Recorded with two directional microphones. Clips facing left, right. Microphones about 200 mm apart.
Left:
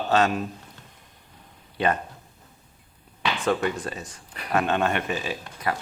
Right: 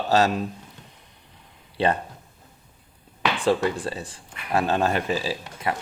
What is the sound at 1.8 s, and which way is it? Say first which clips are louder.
Speech: right 2 dB; 30° right (ahead or behind).